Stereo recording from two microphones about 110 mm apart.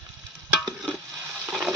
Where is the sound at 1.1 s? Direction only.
25° right (ahead or behind).